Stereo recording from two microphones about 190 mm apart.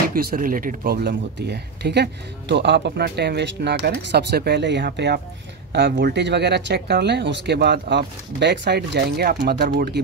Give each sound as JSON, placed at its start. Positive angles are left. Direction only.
{"t": 0.1, "sound": "speech", "side_deg": -50}